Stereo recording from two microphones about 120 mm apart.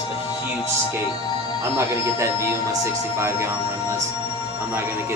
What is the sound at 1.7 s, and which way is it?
Speech, 25° right (ahead or behind).